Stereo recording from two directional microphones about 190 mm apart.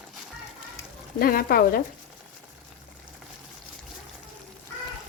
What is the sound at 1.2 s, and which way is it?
Speech, 50° left (ahead or behind).